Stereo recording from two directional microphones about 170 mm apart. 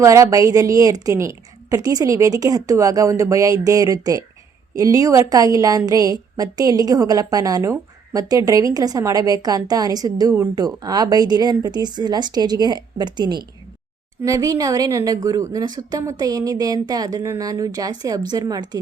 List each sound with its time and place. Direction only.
0.0 s a woman's voice: 20° right (ahead or behind)